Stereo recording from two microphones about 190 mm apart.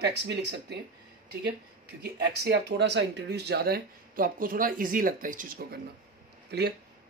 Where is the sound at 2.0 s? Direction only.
60° right (ahead or behind).